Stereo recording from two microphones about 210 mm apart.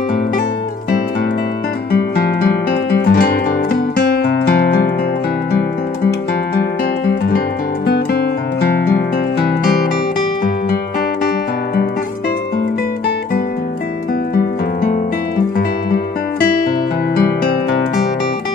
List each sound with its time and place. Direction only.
1.9 s music: 50° left (ahead or behind)
7.1 s music: 45° left (ahead or behind)